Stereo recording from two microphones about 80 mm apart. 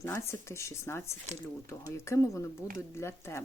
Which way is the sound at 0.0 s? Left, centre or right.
Left.